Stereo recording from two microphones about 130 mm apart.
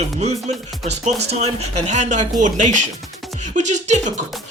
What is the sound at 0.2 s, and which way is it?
Speech, 60° right (ahead or behind).